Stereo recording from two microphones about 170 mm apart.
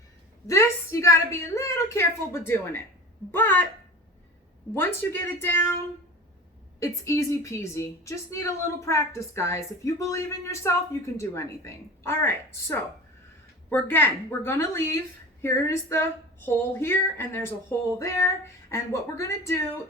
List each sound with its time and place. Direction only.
0.4 s a woman's voice: 15° left (ahead or behind)
4.7 s a woman's voice: 15° left (ahead or behind)
6.7 s a woman's voice: 15° left (ahead or behind)